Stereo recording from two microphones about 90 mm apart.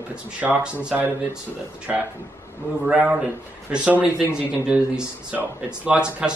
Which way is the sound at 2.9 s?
15° right (ahead or behind).